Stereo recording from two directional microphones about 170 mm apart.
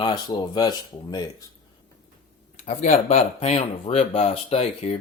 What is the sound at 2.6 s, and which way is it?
Speech, 45° left (ahead or behind).